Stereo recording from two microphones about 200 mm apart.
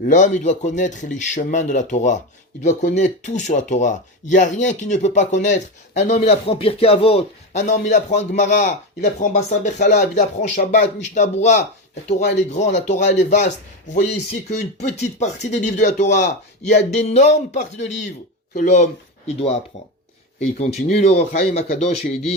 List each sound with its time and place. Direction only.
0.0 s speech: 40° left (ahead or behind)
14.5 s speech: 35° left (ahead or behind)
20.6 s speech: 35° left (ahead or behind)